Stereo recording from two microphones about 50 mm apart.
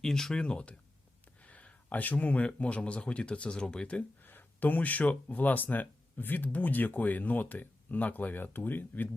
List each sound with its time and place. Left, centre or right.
0.0 s speech: centre
4.2 s speech: left